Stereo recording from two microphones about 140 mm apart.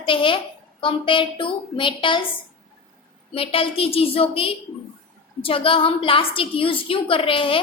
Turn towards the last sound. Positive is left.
turn(degrees=40)  # may be behind; listen again after turning